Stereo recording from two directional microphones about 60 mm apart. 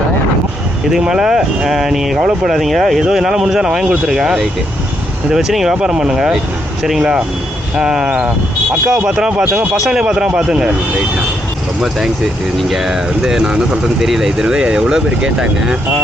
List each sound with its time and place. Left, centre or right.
0.9 s speech: centre
7.8 s speech: centre
9.3 s speech: right
9.8 s speech: centre
10.1 s speech: centre
12.6 s speech: centre